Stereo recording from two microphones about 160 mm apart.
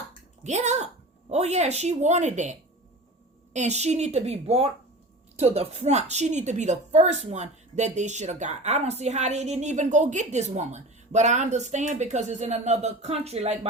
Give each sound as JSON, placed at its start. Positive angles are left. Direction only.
{"t": 0.4, "sound": "a woman's voice", "side_deg": -45}